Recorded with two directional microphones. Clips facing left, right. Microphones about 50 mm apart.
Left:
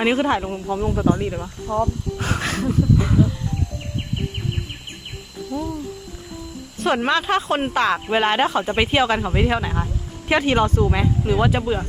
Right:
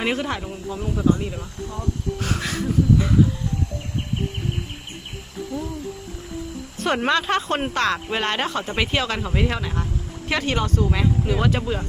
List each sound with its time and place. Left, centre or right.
0.0 s speech: centre; by 1.2 s left
1.2 s speech: left
1.7 s speech: left
2.1 s speech: left
2.4 s a sound: left
5.5 s speech: right
6.7 s speech: centre